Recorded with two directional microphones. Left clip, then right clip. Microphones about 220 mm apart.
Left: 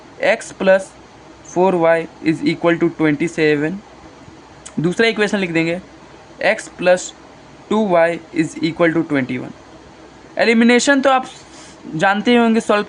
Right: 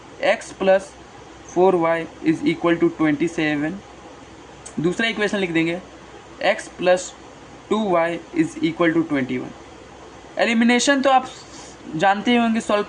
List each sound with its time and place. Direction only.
0.2 s speech: 30° left (ahead or behind)
4.8 s speech: 30° left (ahead or behind)